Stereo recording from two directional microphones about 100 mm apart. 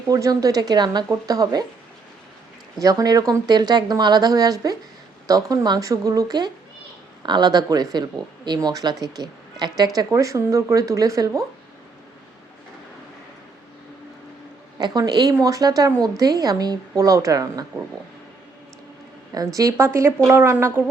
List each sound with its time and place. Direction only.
0.1 s speech: 35° right (ahead or behind)
2.8 s speech: 40° right (ahead or behind)
14.8 s speech: 45° right (ahead or behind)
19.5 s a woman's voice: 30° right (ahead or behind)